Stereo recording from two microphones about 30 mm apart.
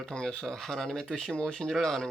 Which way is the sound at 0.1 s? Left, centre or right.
Left.